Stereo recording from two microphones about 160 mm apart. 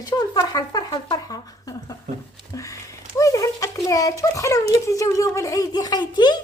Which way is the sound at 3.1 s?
20° left (ahead or behind).